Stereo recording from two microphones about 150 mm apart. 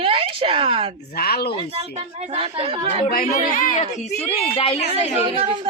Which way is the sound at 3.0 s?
70° left (ahead or behind).